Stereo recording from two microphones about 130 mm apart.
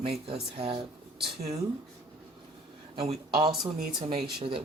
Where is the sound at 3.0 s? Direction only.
45° right (ahead or behind).